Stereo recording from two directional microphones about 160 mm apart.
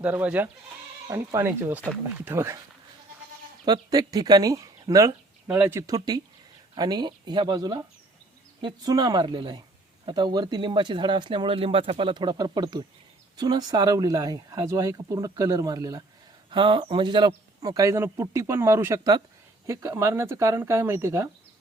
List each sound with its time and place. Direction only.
0.0 s a man's voice: 10° right (ahead or behind)
3.7 s a man's voice: 25° right (ahead or behind)